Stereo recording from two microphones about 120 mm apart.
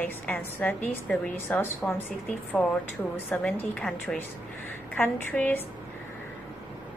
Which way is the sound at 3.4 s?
5° left (ahead or behind).